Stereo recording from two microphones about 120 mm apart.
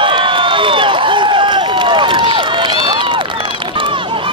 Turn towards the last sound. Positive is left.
turn(degrees=-45)  # may be behind; listen again after turning